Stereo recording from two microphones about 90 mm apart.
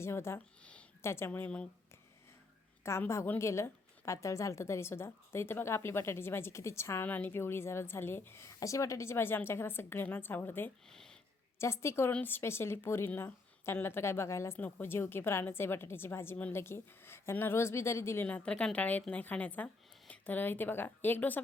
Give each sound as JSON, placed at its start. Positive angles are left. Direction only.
{"t": 0.0, "sound": "a woman's voice", "side_deg": 30}
{"t": 0.6, "sound": "a sound", "side_deg": 15}
{"t": 1.0, "sound": "a woman's voice", "side_deg": 30}
{"t": 2.8, "sound": "a woman's voice", "side_deg": 30}
{"t": 10.8, "sound": "a sound", "side_deg": 5}
{"t": 11.6, "sound": "a woman's voice", "side_deg": 30}
{"t": 18.3, "sound": "speech", "side_deg": 15}